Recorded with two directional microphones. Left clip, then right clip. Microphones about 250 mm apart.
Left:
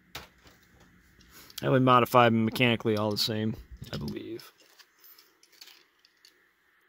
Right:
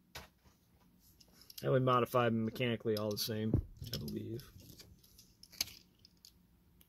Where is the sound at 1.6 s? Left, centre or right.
Left.